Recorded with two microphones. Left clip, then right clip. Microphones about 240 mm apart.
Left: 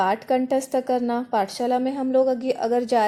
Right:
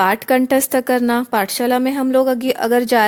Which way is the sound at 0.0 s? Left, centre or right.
Right.